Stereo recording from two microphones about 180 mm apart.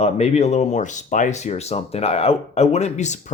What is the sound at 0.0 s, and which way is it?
A man's voice, 35° left (ahead or behind).